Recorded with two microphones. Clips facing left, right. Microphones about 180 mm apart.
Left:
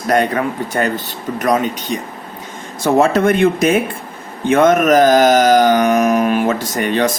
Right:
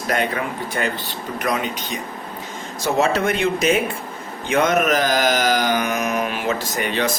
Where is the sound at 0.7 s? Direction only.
45° left (ahead or behind).